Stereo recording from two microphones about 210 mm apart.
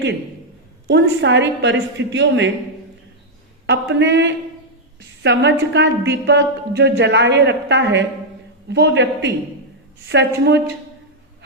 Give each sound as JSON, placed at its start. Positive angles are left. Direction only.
{"t": 0.9, "sound": "a woman's voice", "side_deg": -55}
{"t": 3.7, "sound": "a woman's voice", "side_deg": -55}